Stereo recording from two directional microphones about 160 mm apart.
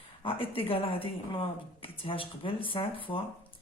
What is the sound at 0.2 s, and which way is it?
A woman's voice, 35° left (ahead or behind).